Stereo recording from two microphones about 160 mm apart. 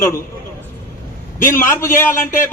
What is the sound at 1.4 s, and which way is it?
Speech, 15° left (ahead or behind).